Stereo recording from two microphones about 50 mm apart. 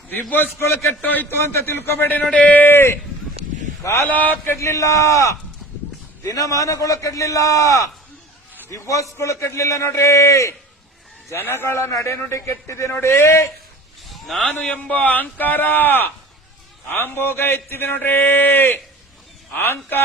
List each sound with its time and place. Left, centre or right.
0.1 s speech: left
0.6 s a man's voice: left
1.0 s speech: left
1.6 s speech: left
2.3 s speech: left
2.6 s speech: left
4.0 s speech: left
4.5 s a man's voice: left
11.3 s a man's voice: left
11.6 s a man's voice: left
12.9 s a man's voice: left
14.1 s a sound: centre
14.4 s speech: left